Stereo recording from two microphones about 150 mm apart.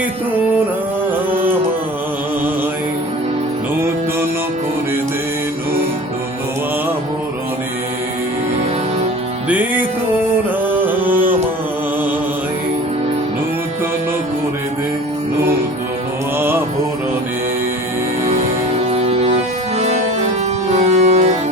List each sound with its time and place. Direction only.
9.5 s music: 10° right (ahead or behind)
10.8 s music: 10° right (ahead or behind)
16.4 s mantra: 15° right (ahead or behind)
18.9 s music: 45° right (ahead or behind)
20.7 s music: 50° right (ahead or behind)